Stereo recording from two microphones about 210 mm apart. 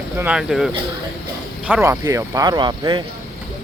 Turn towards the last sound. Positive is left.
turn(degrees=-20)  # may be behind; listen again after turning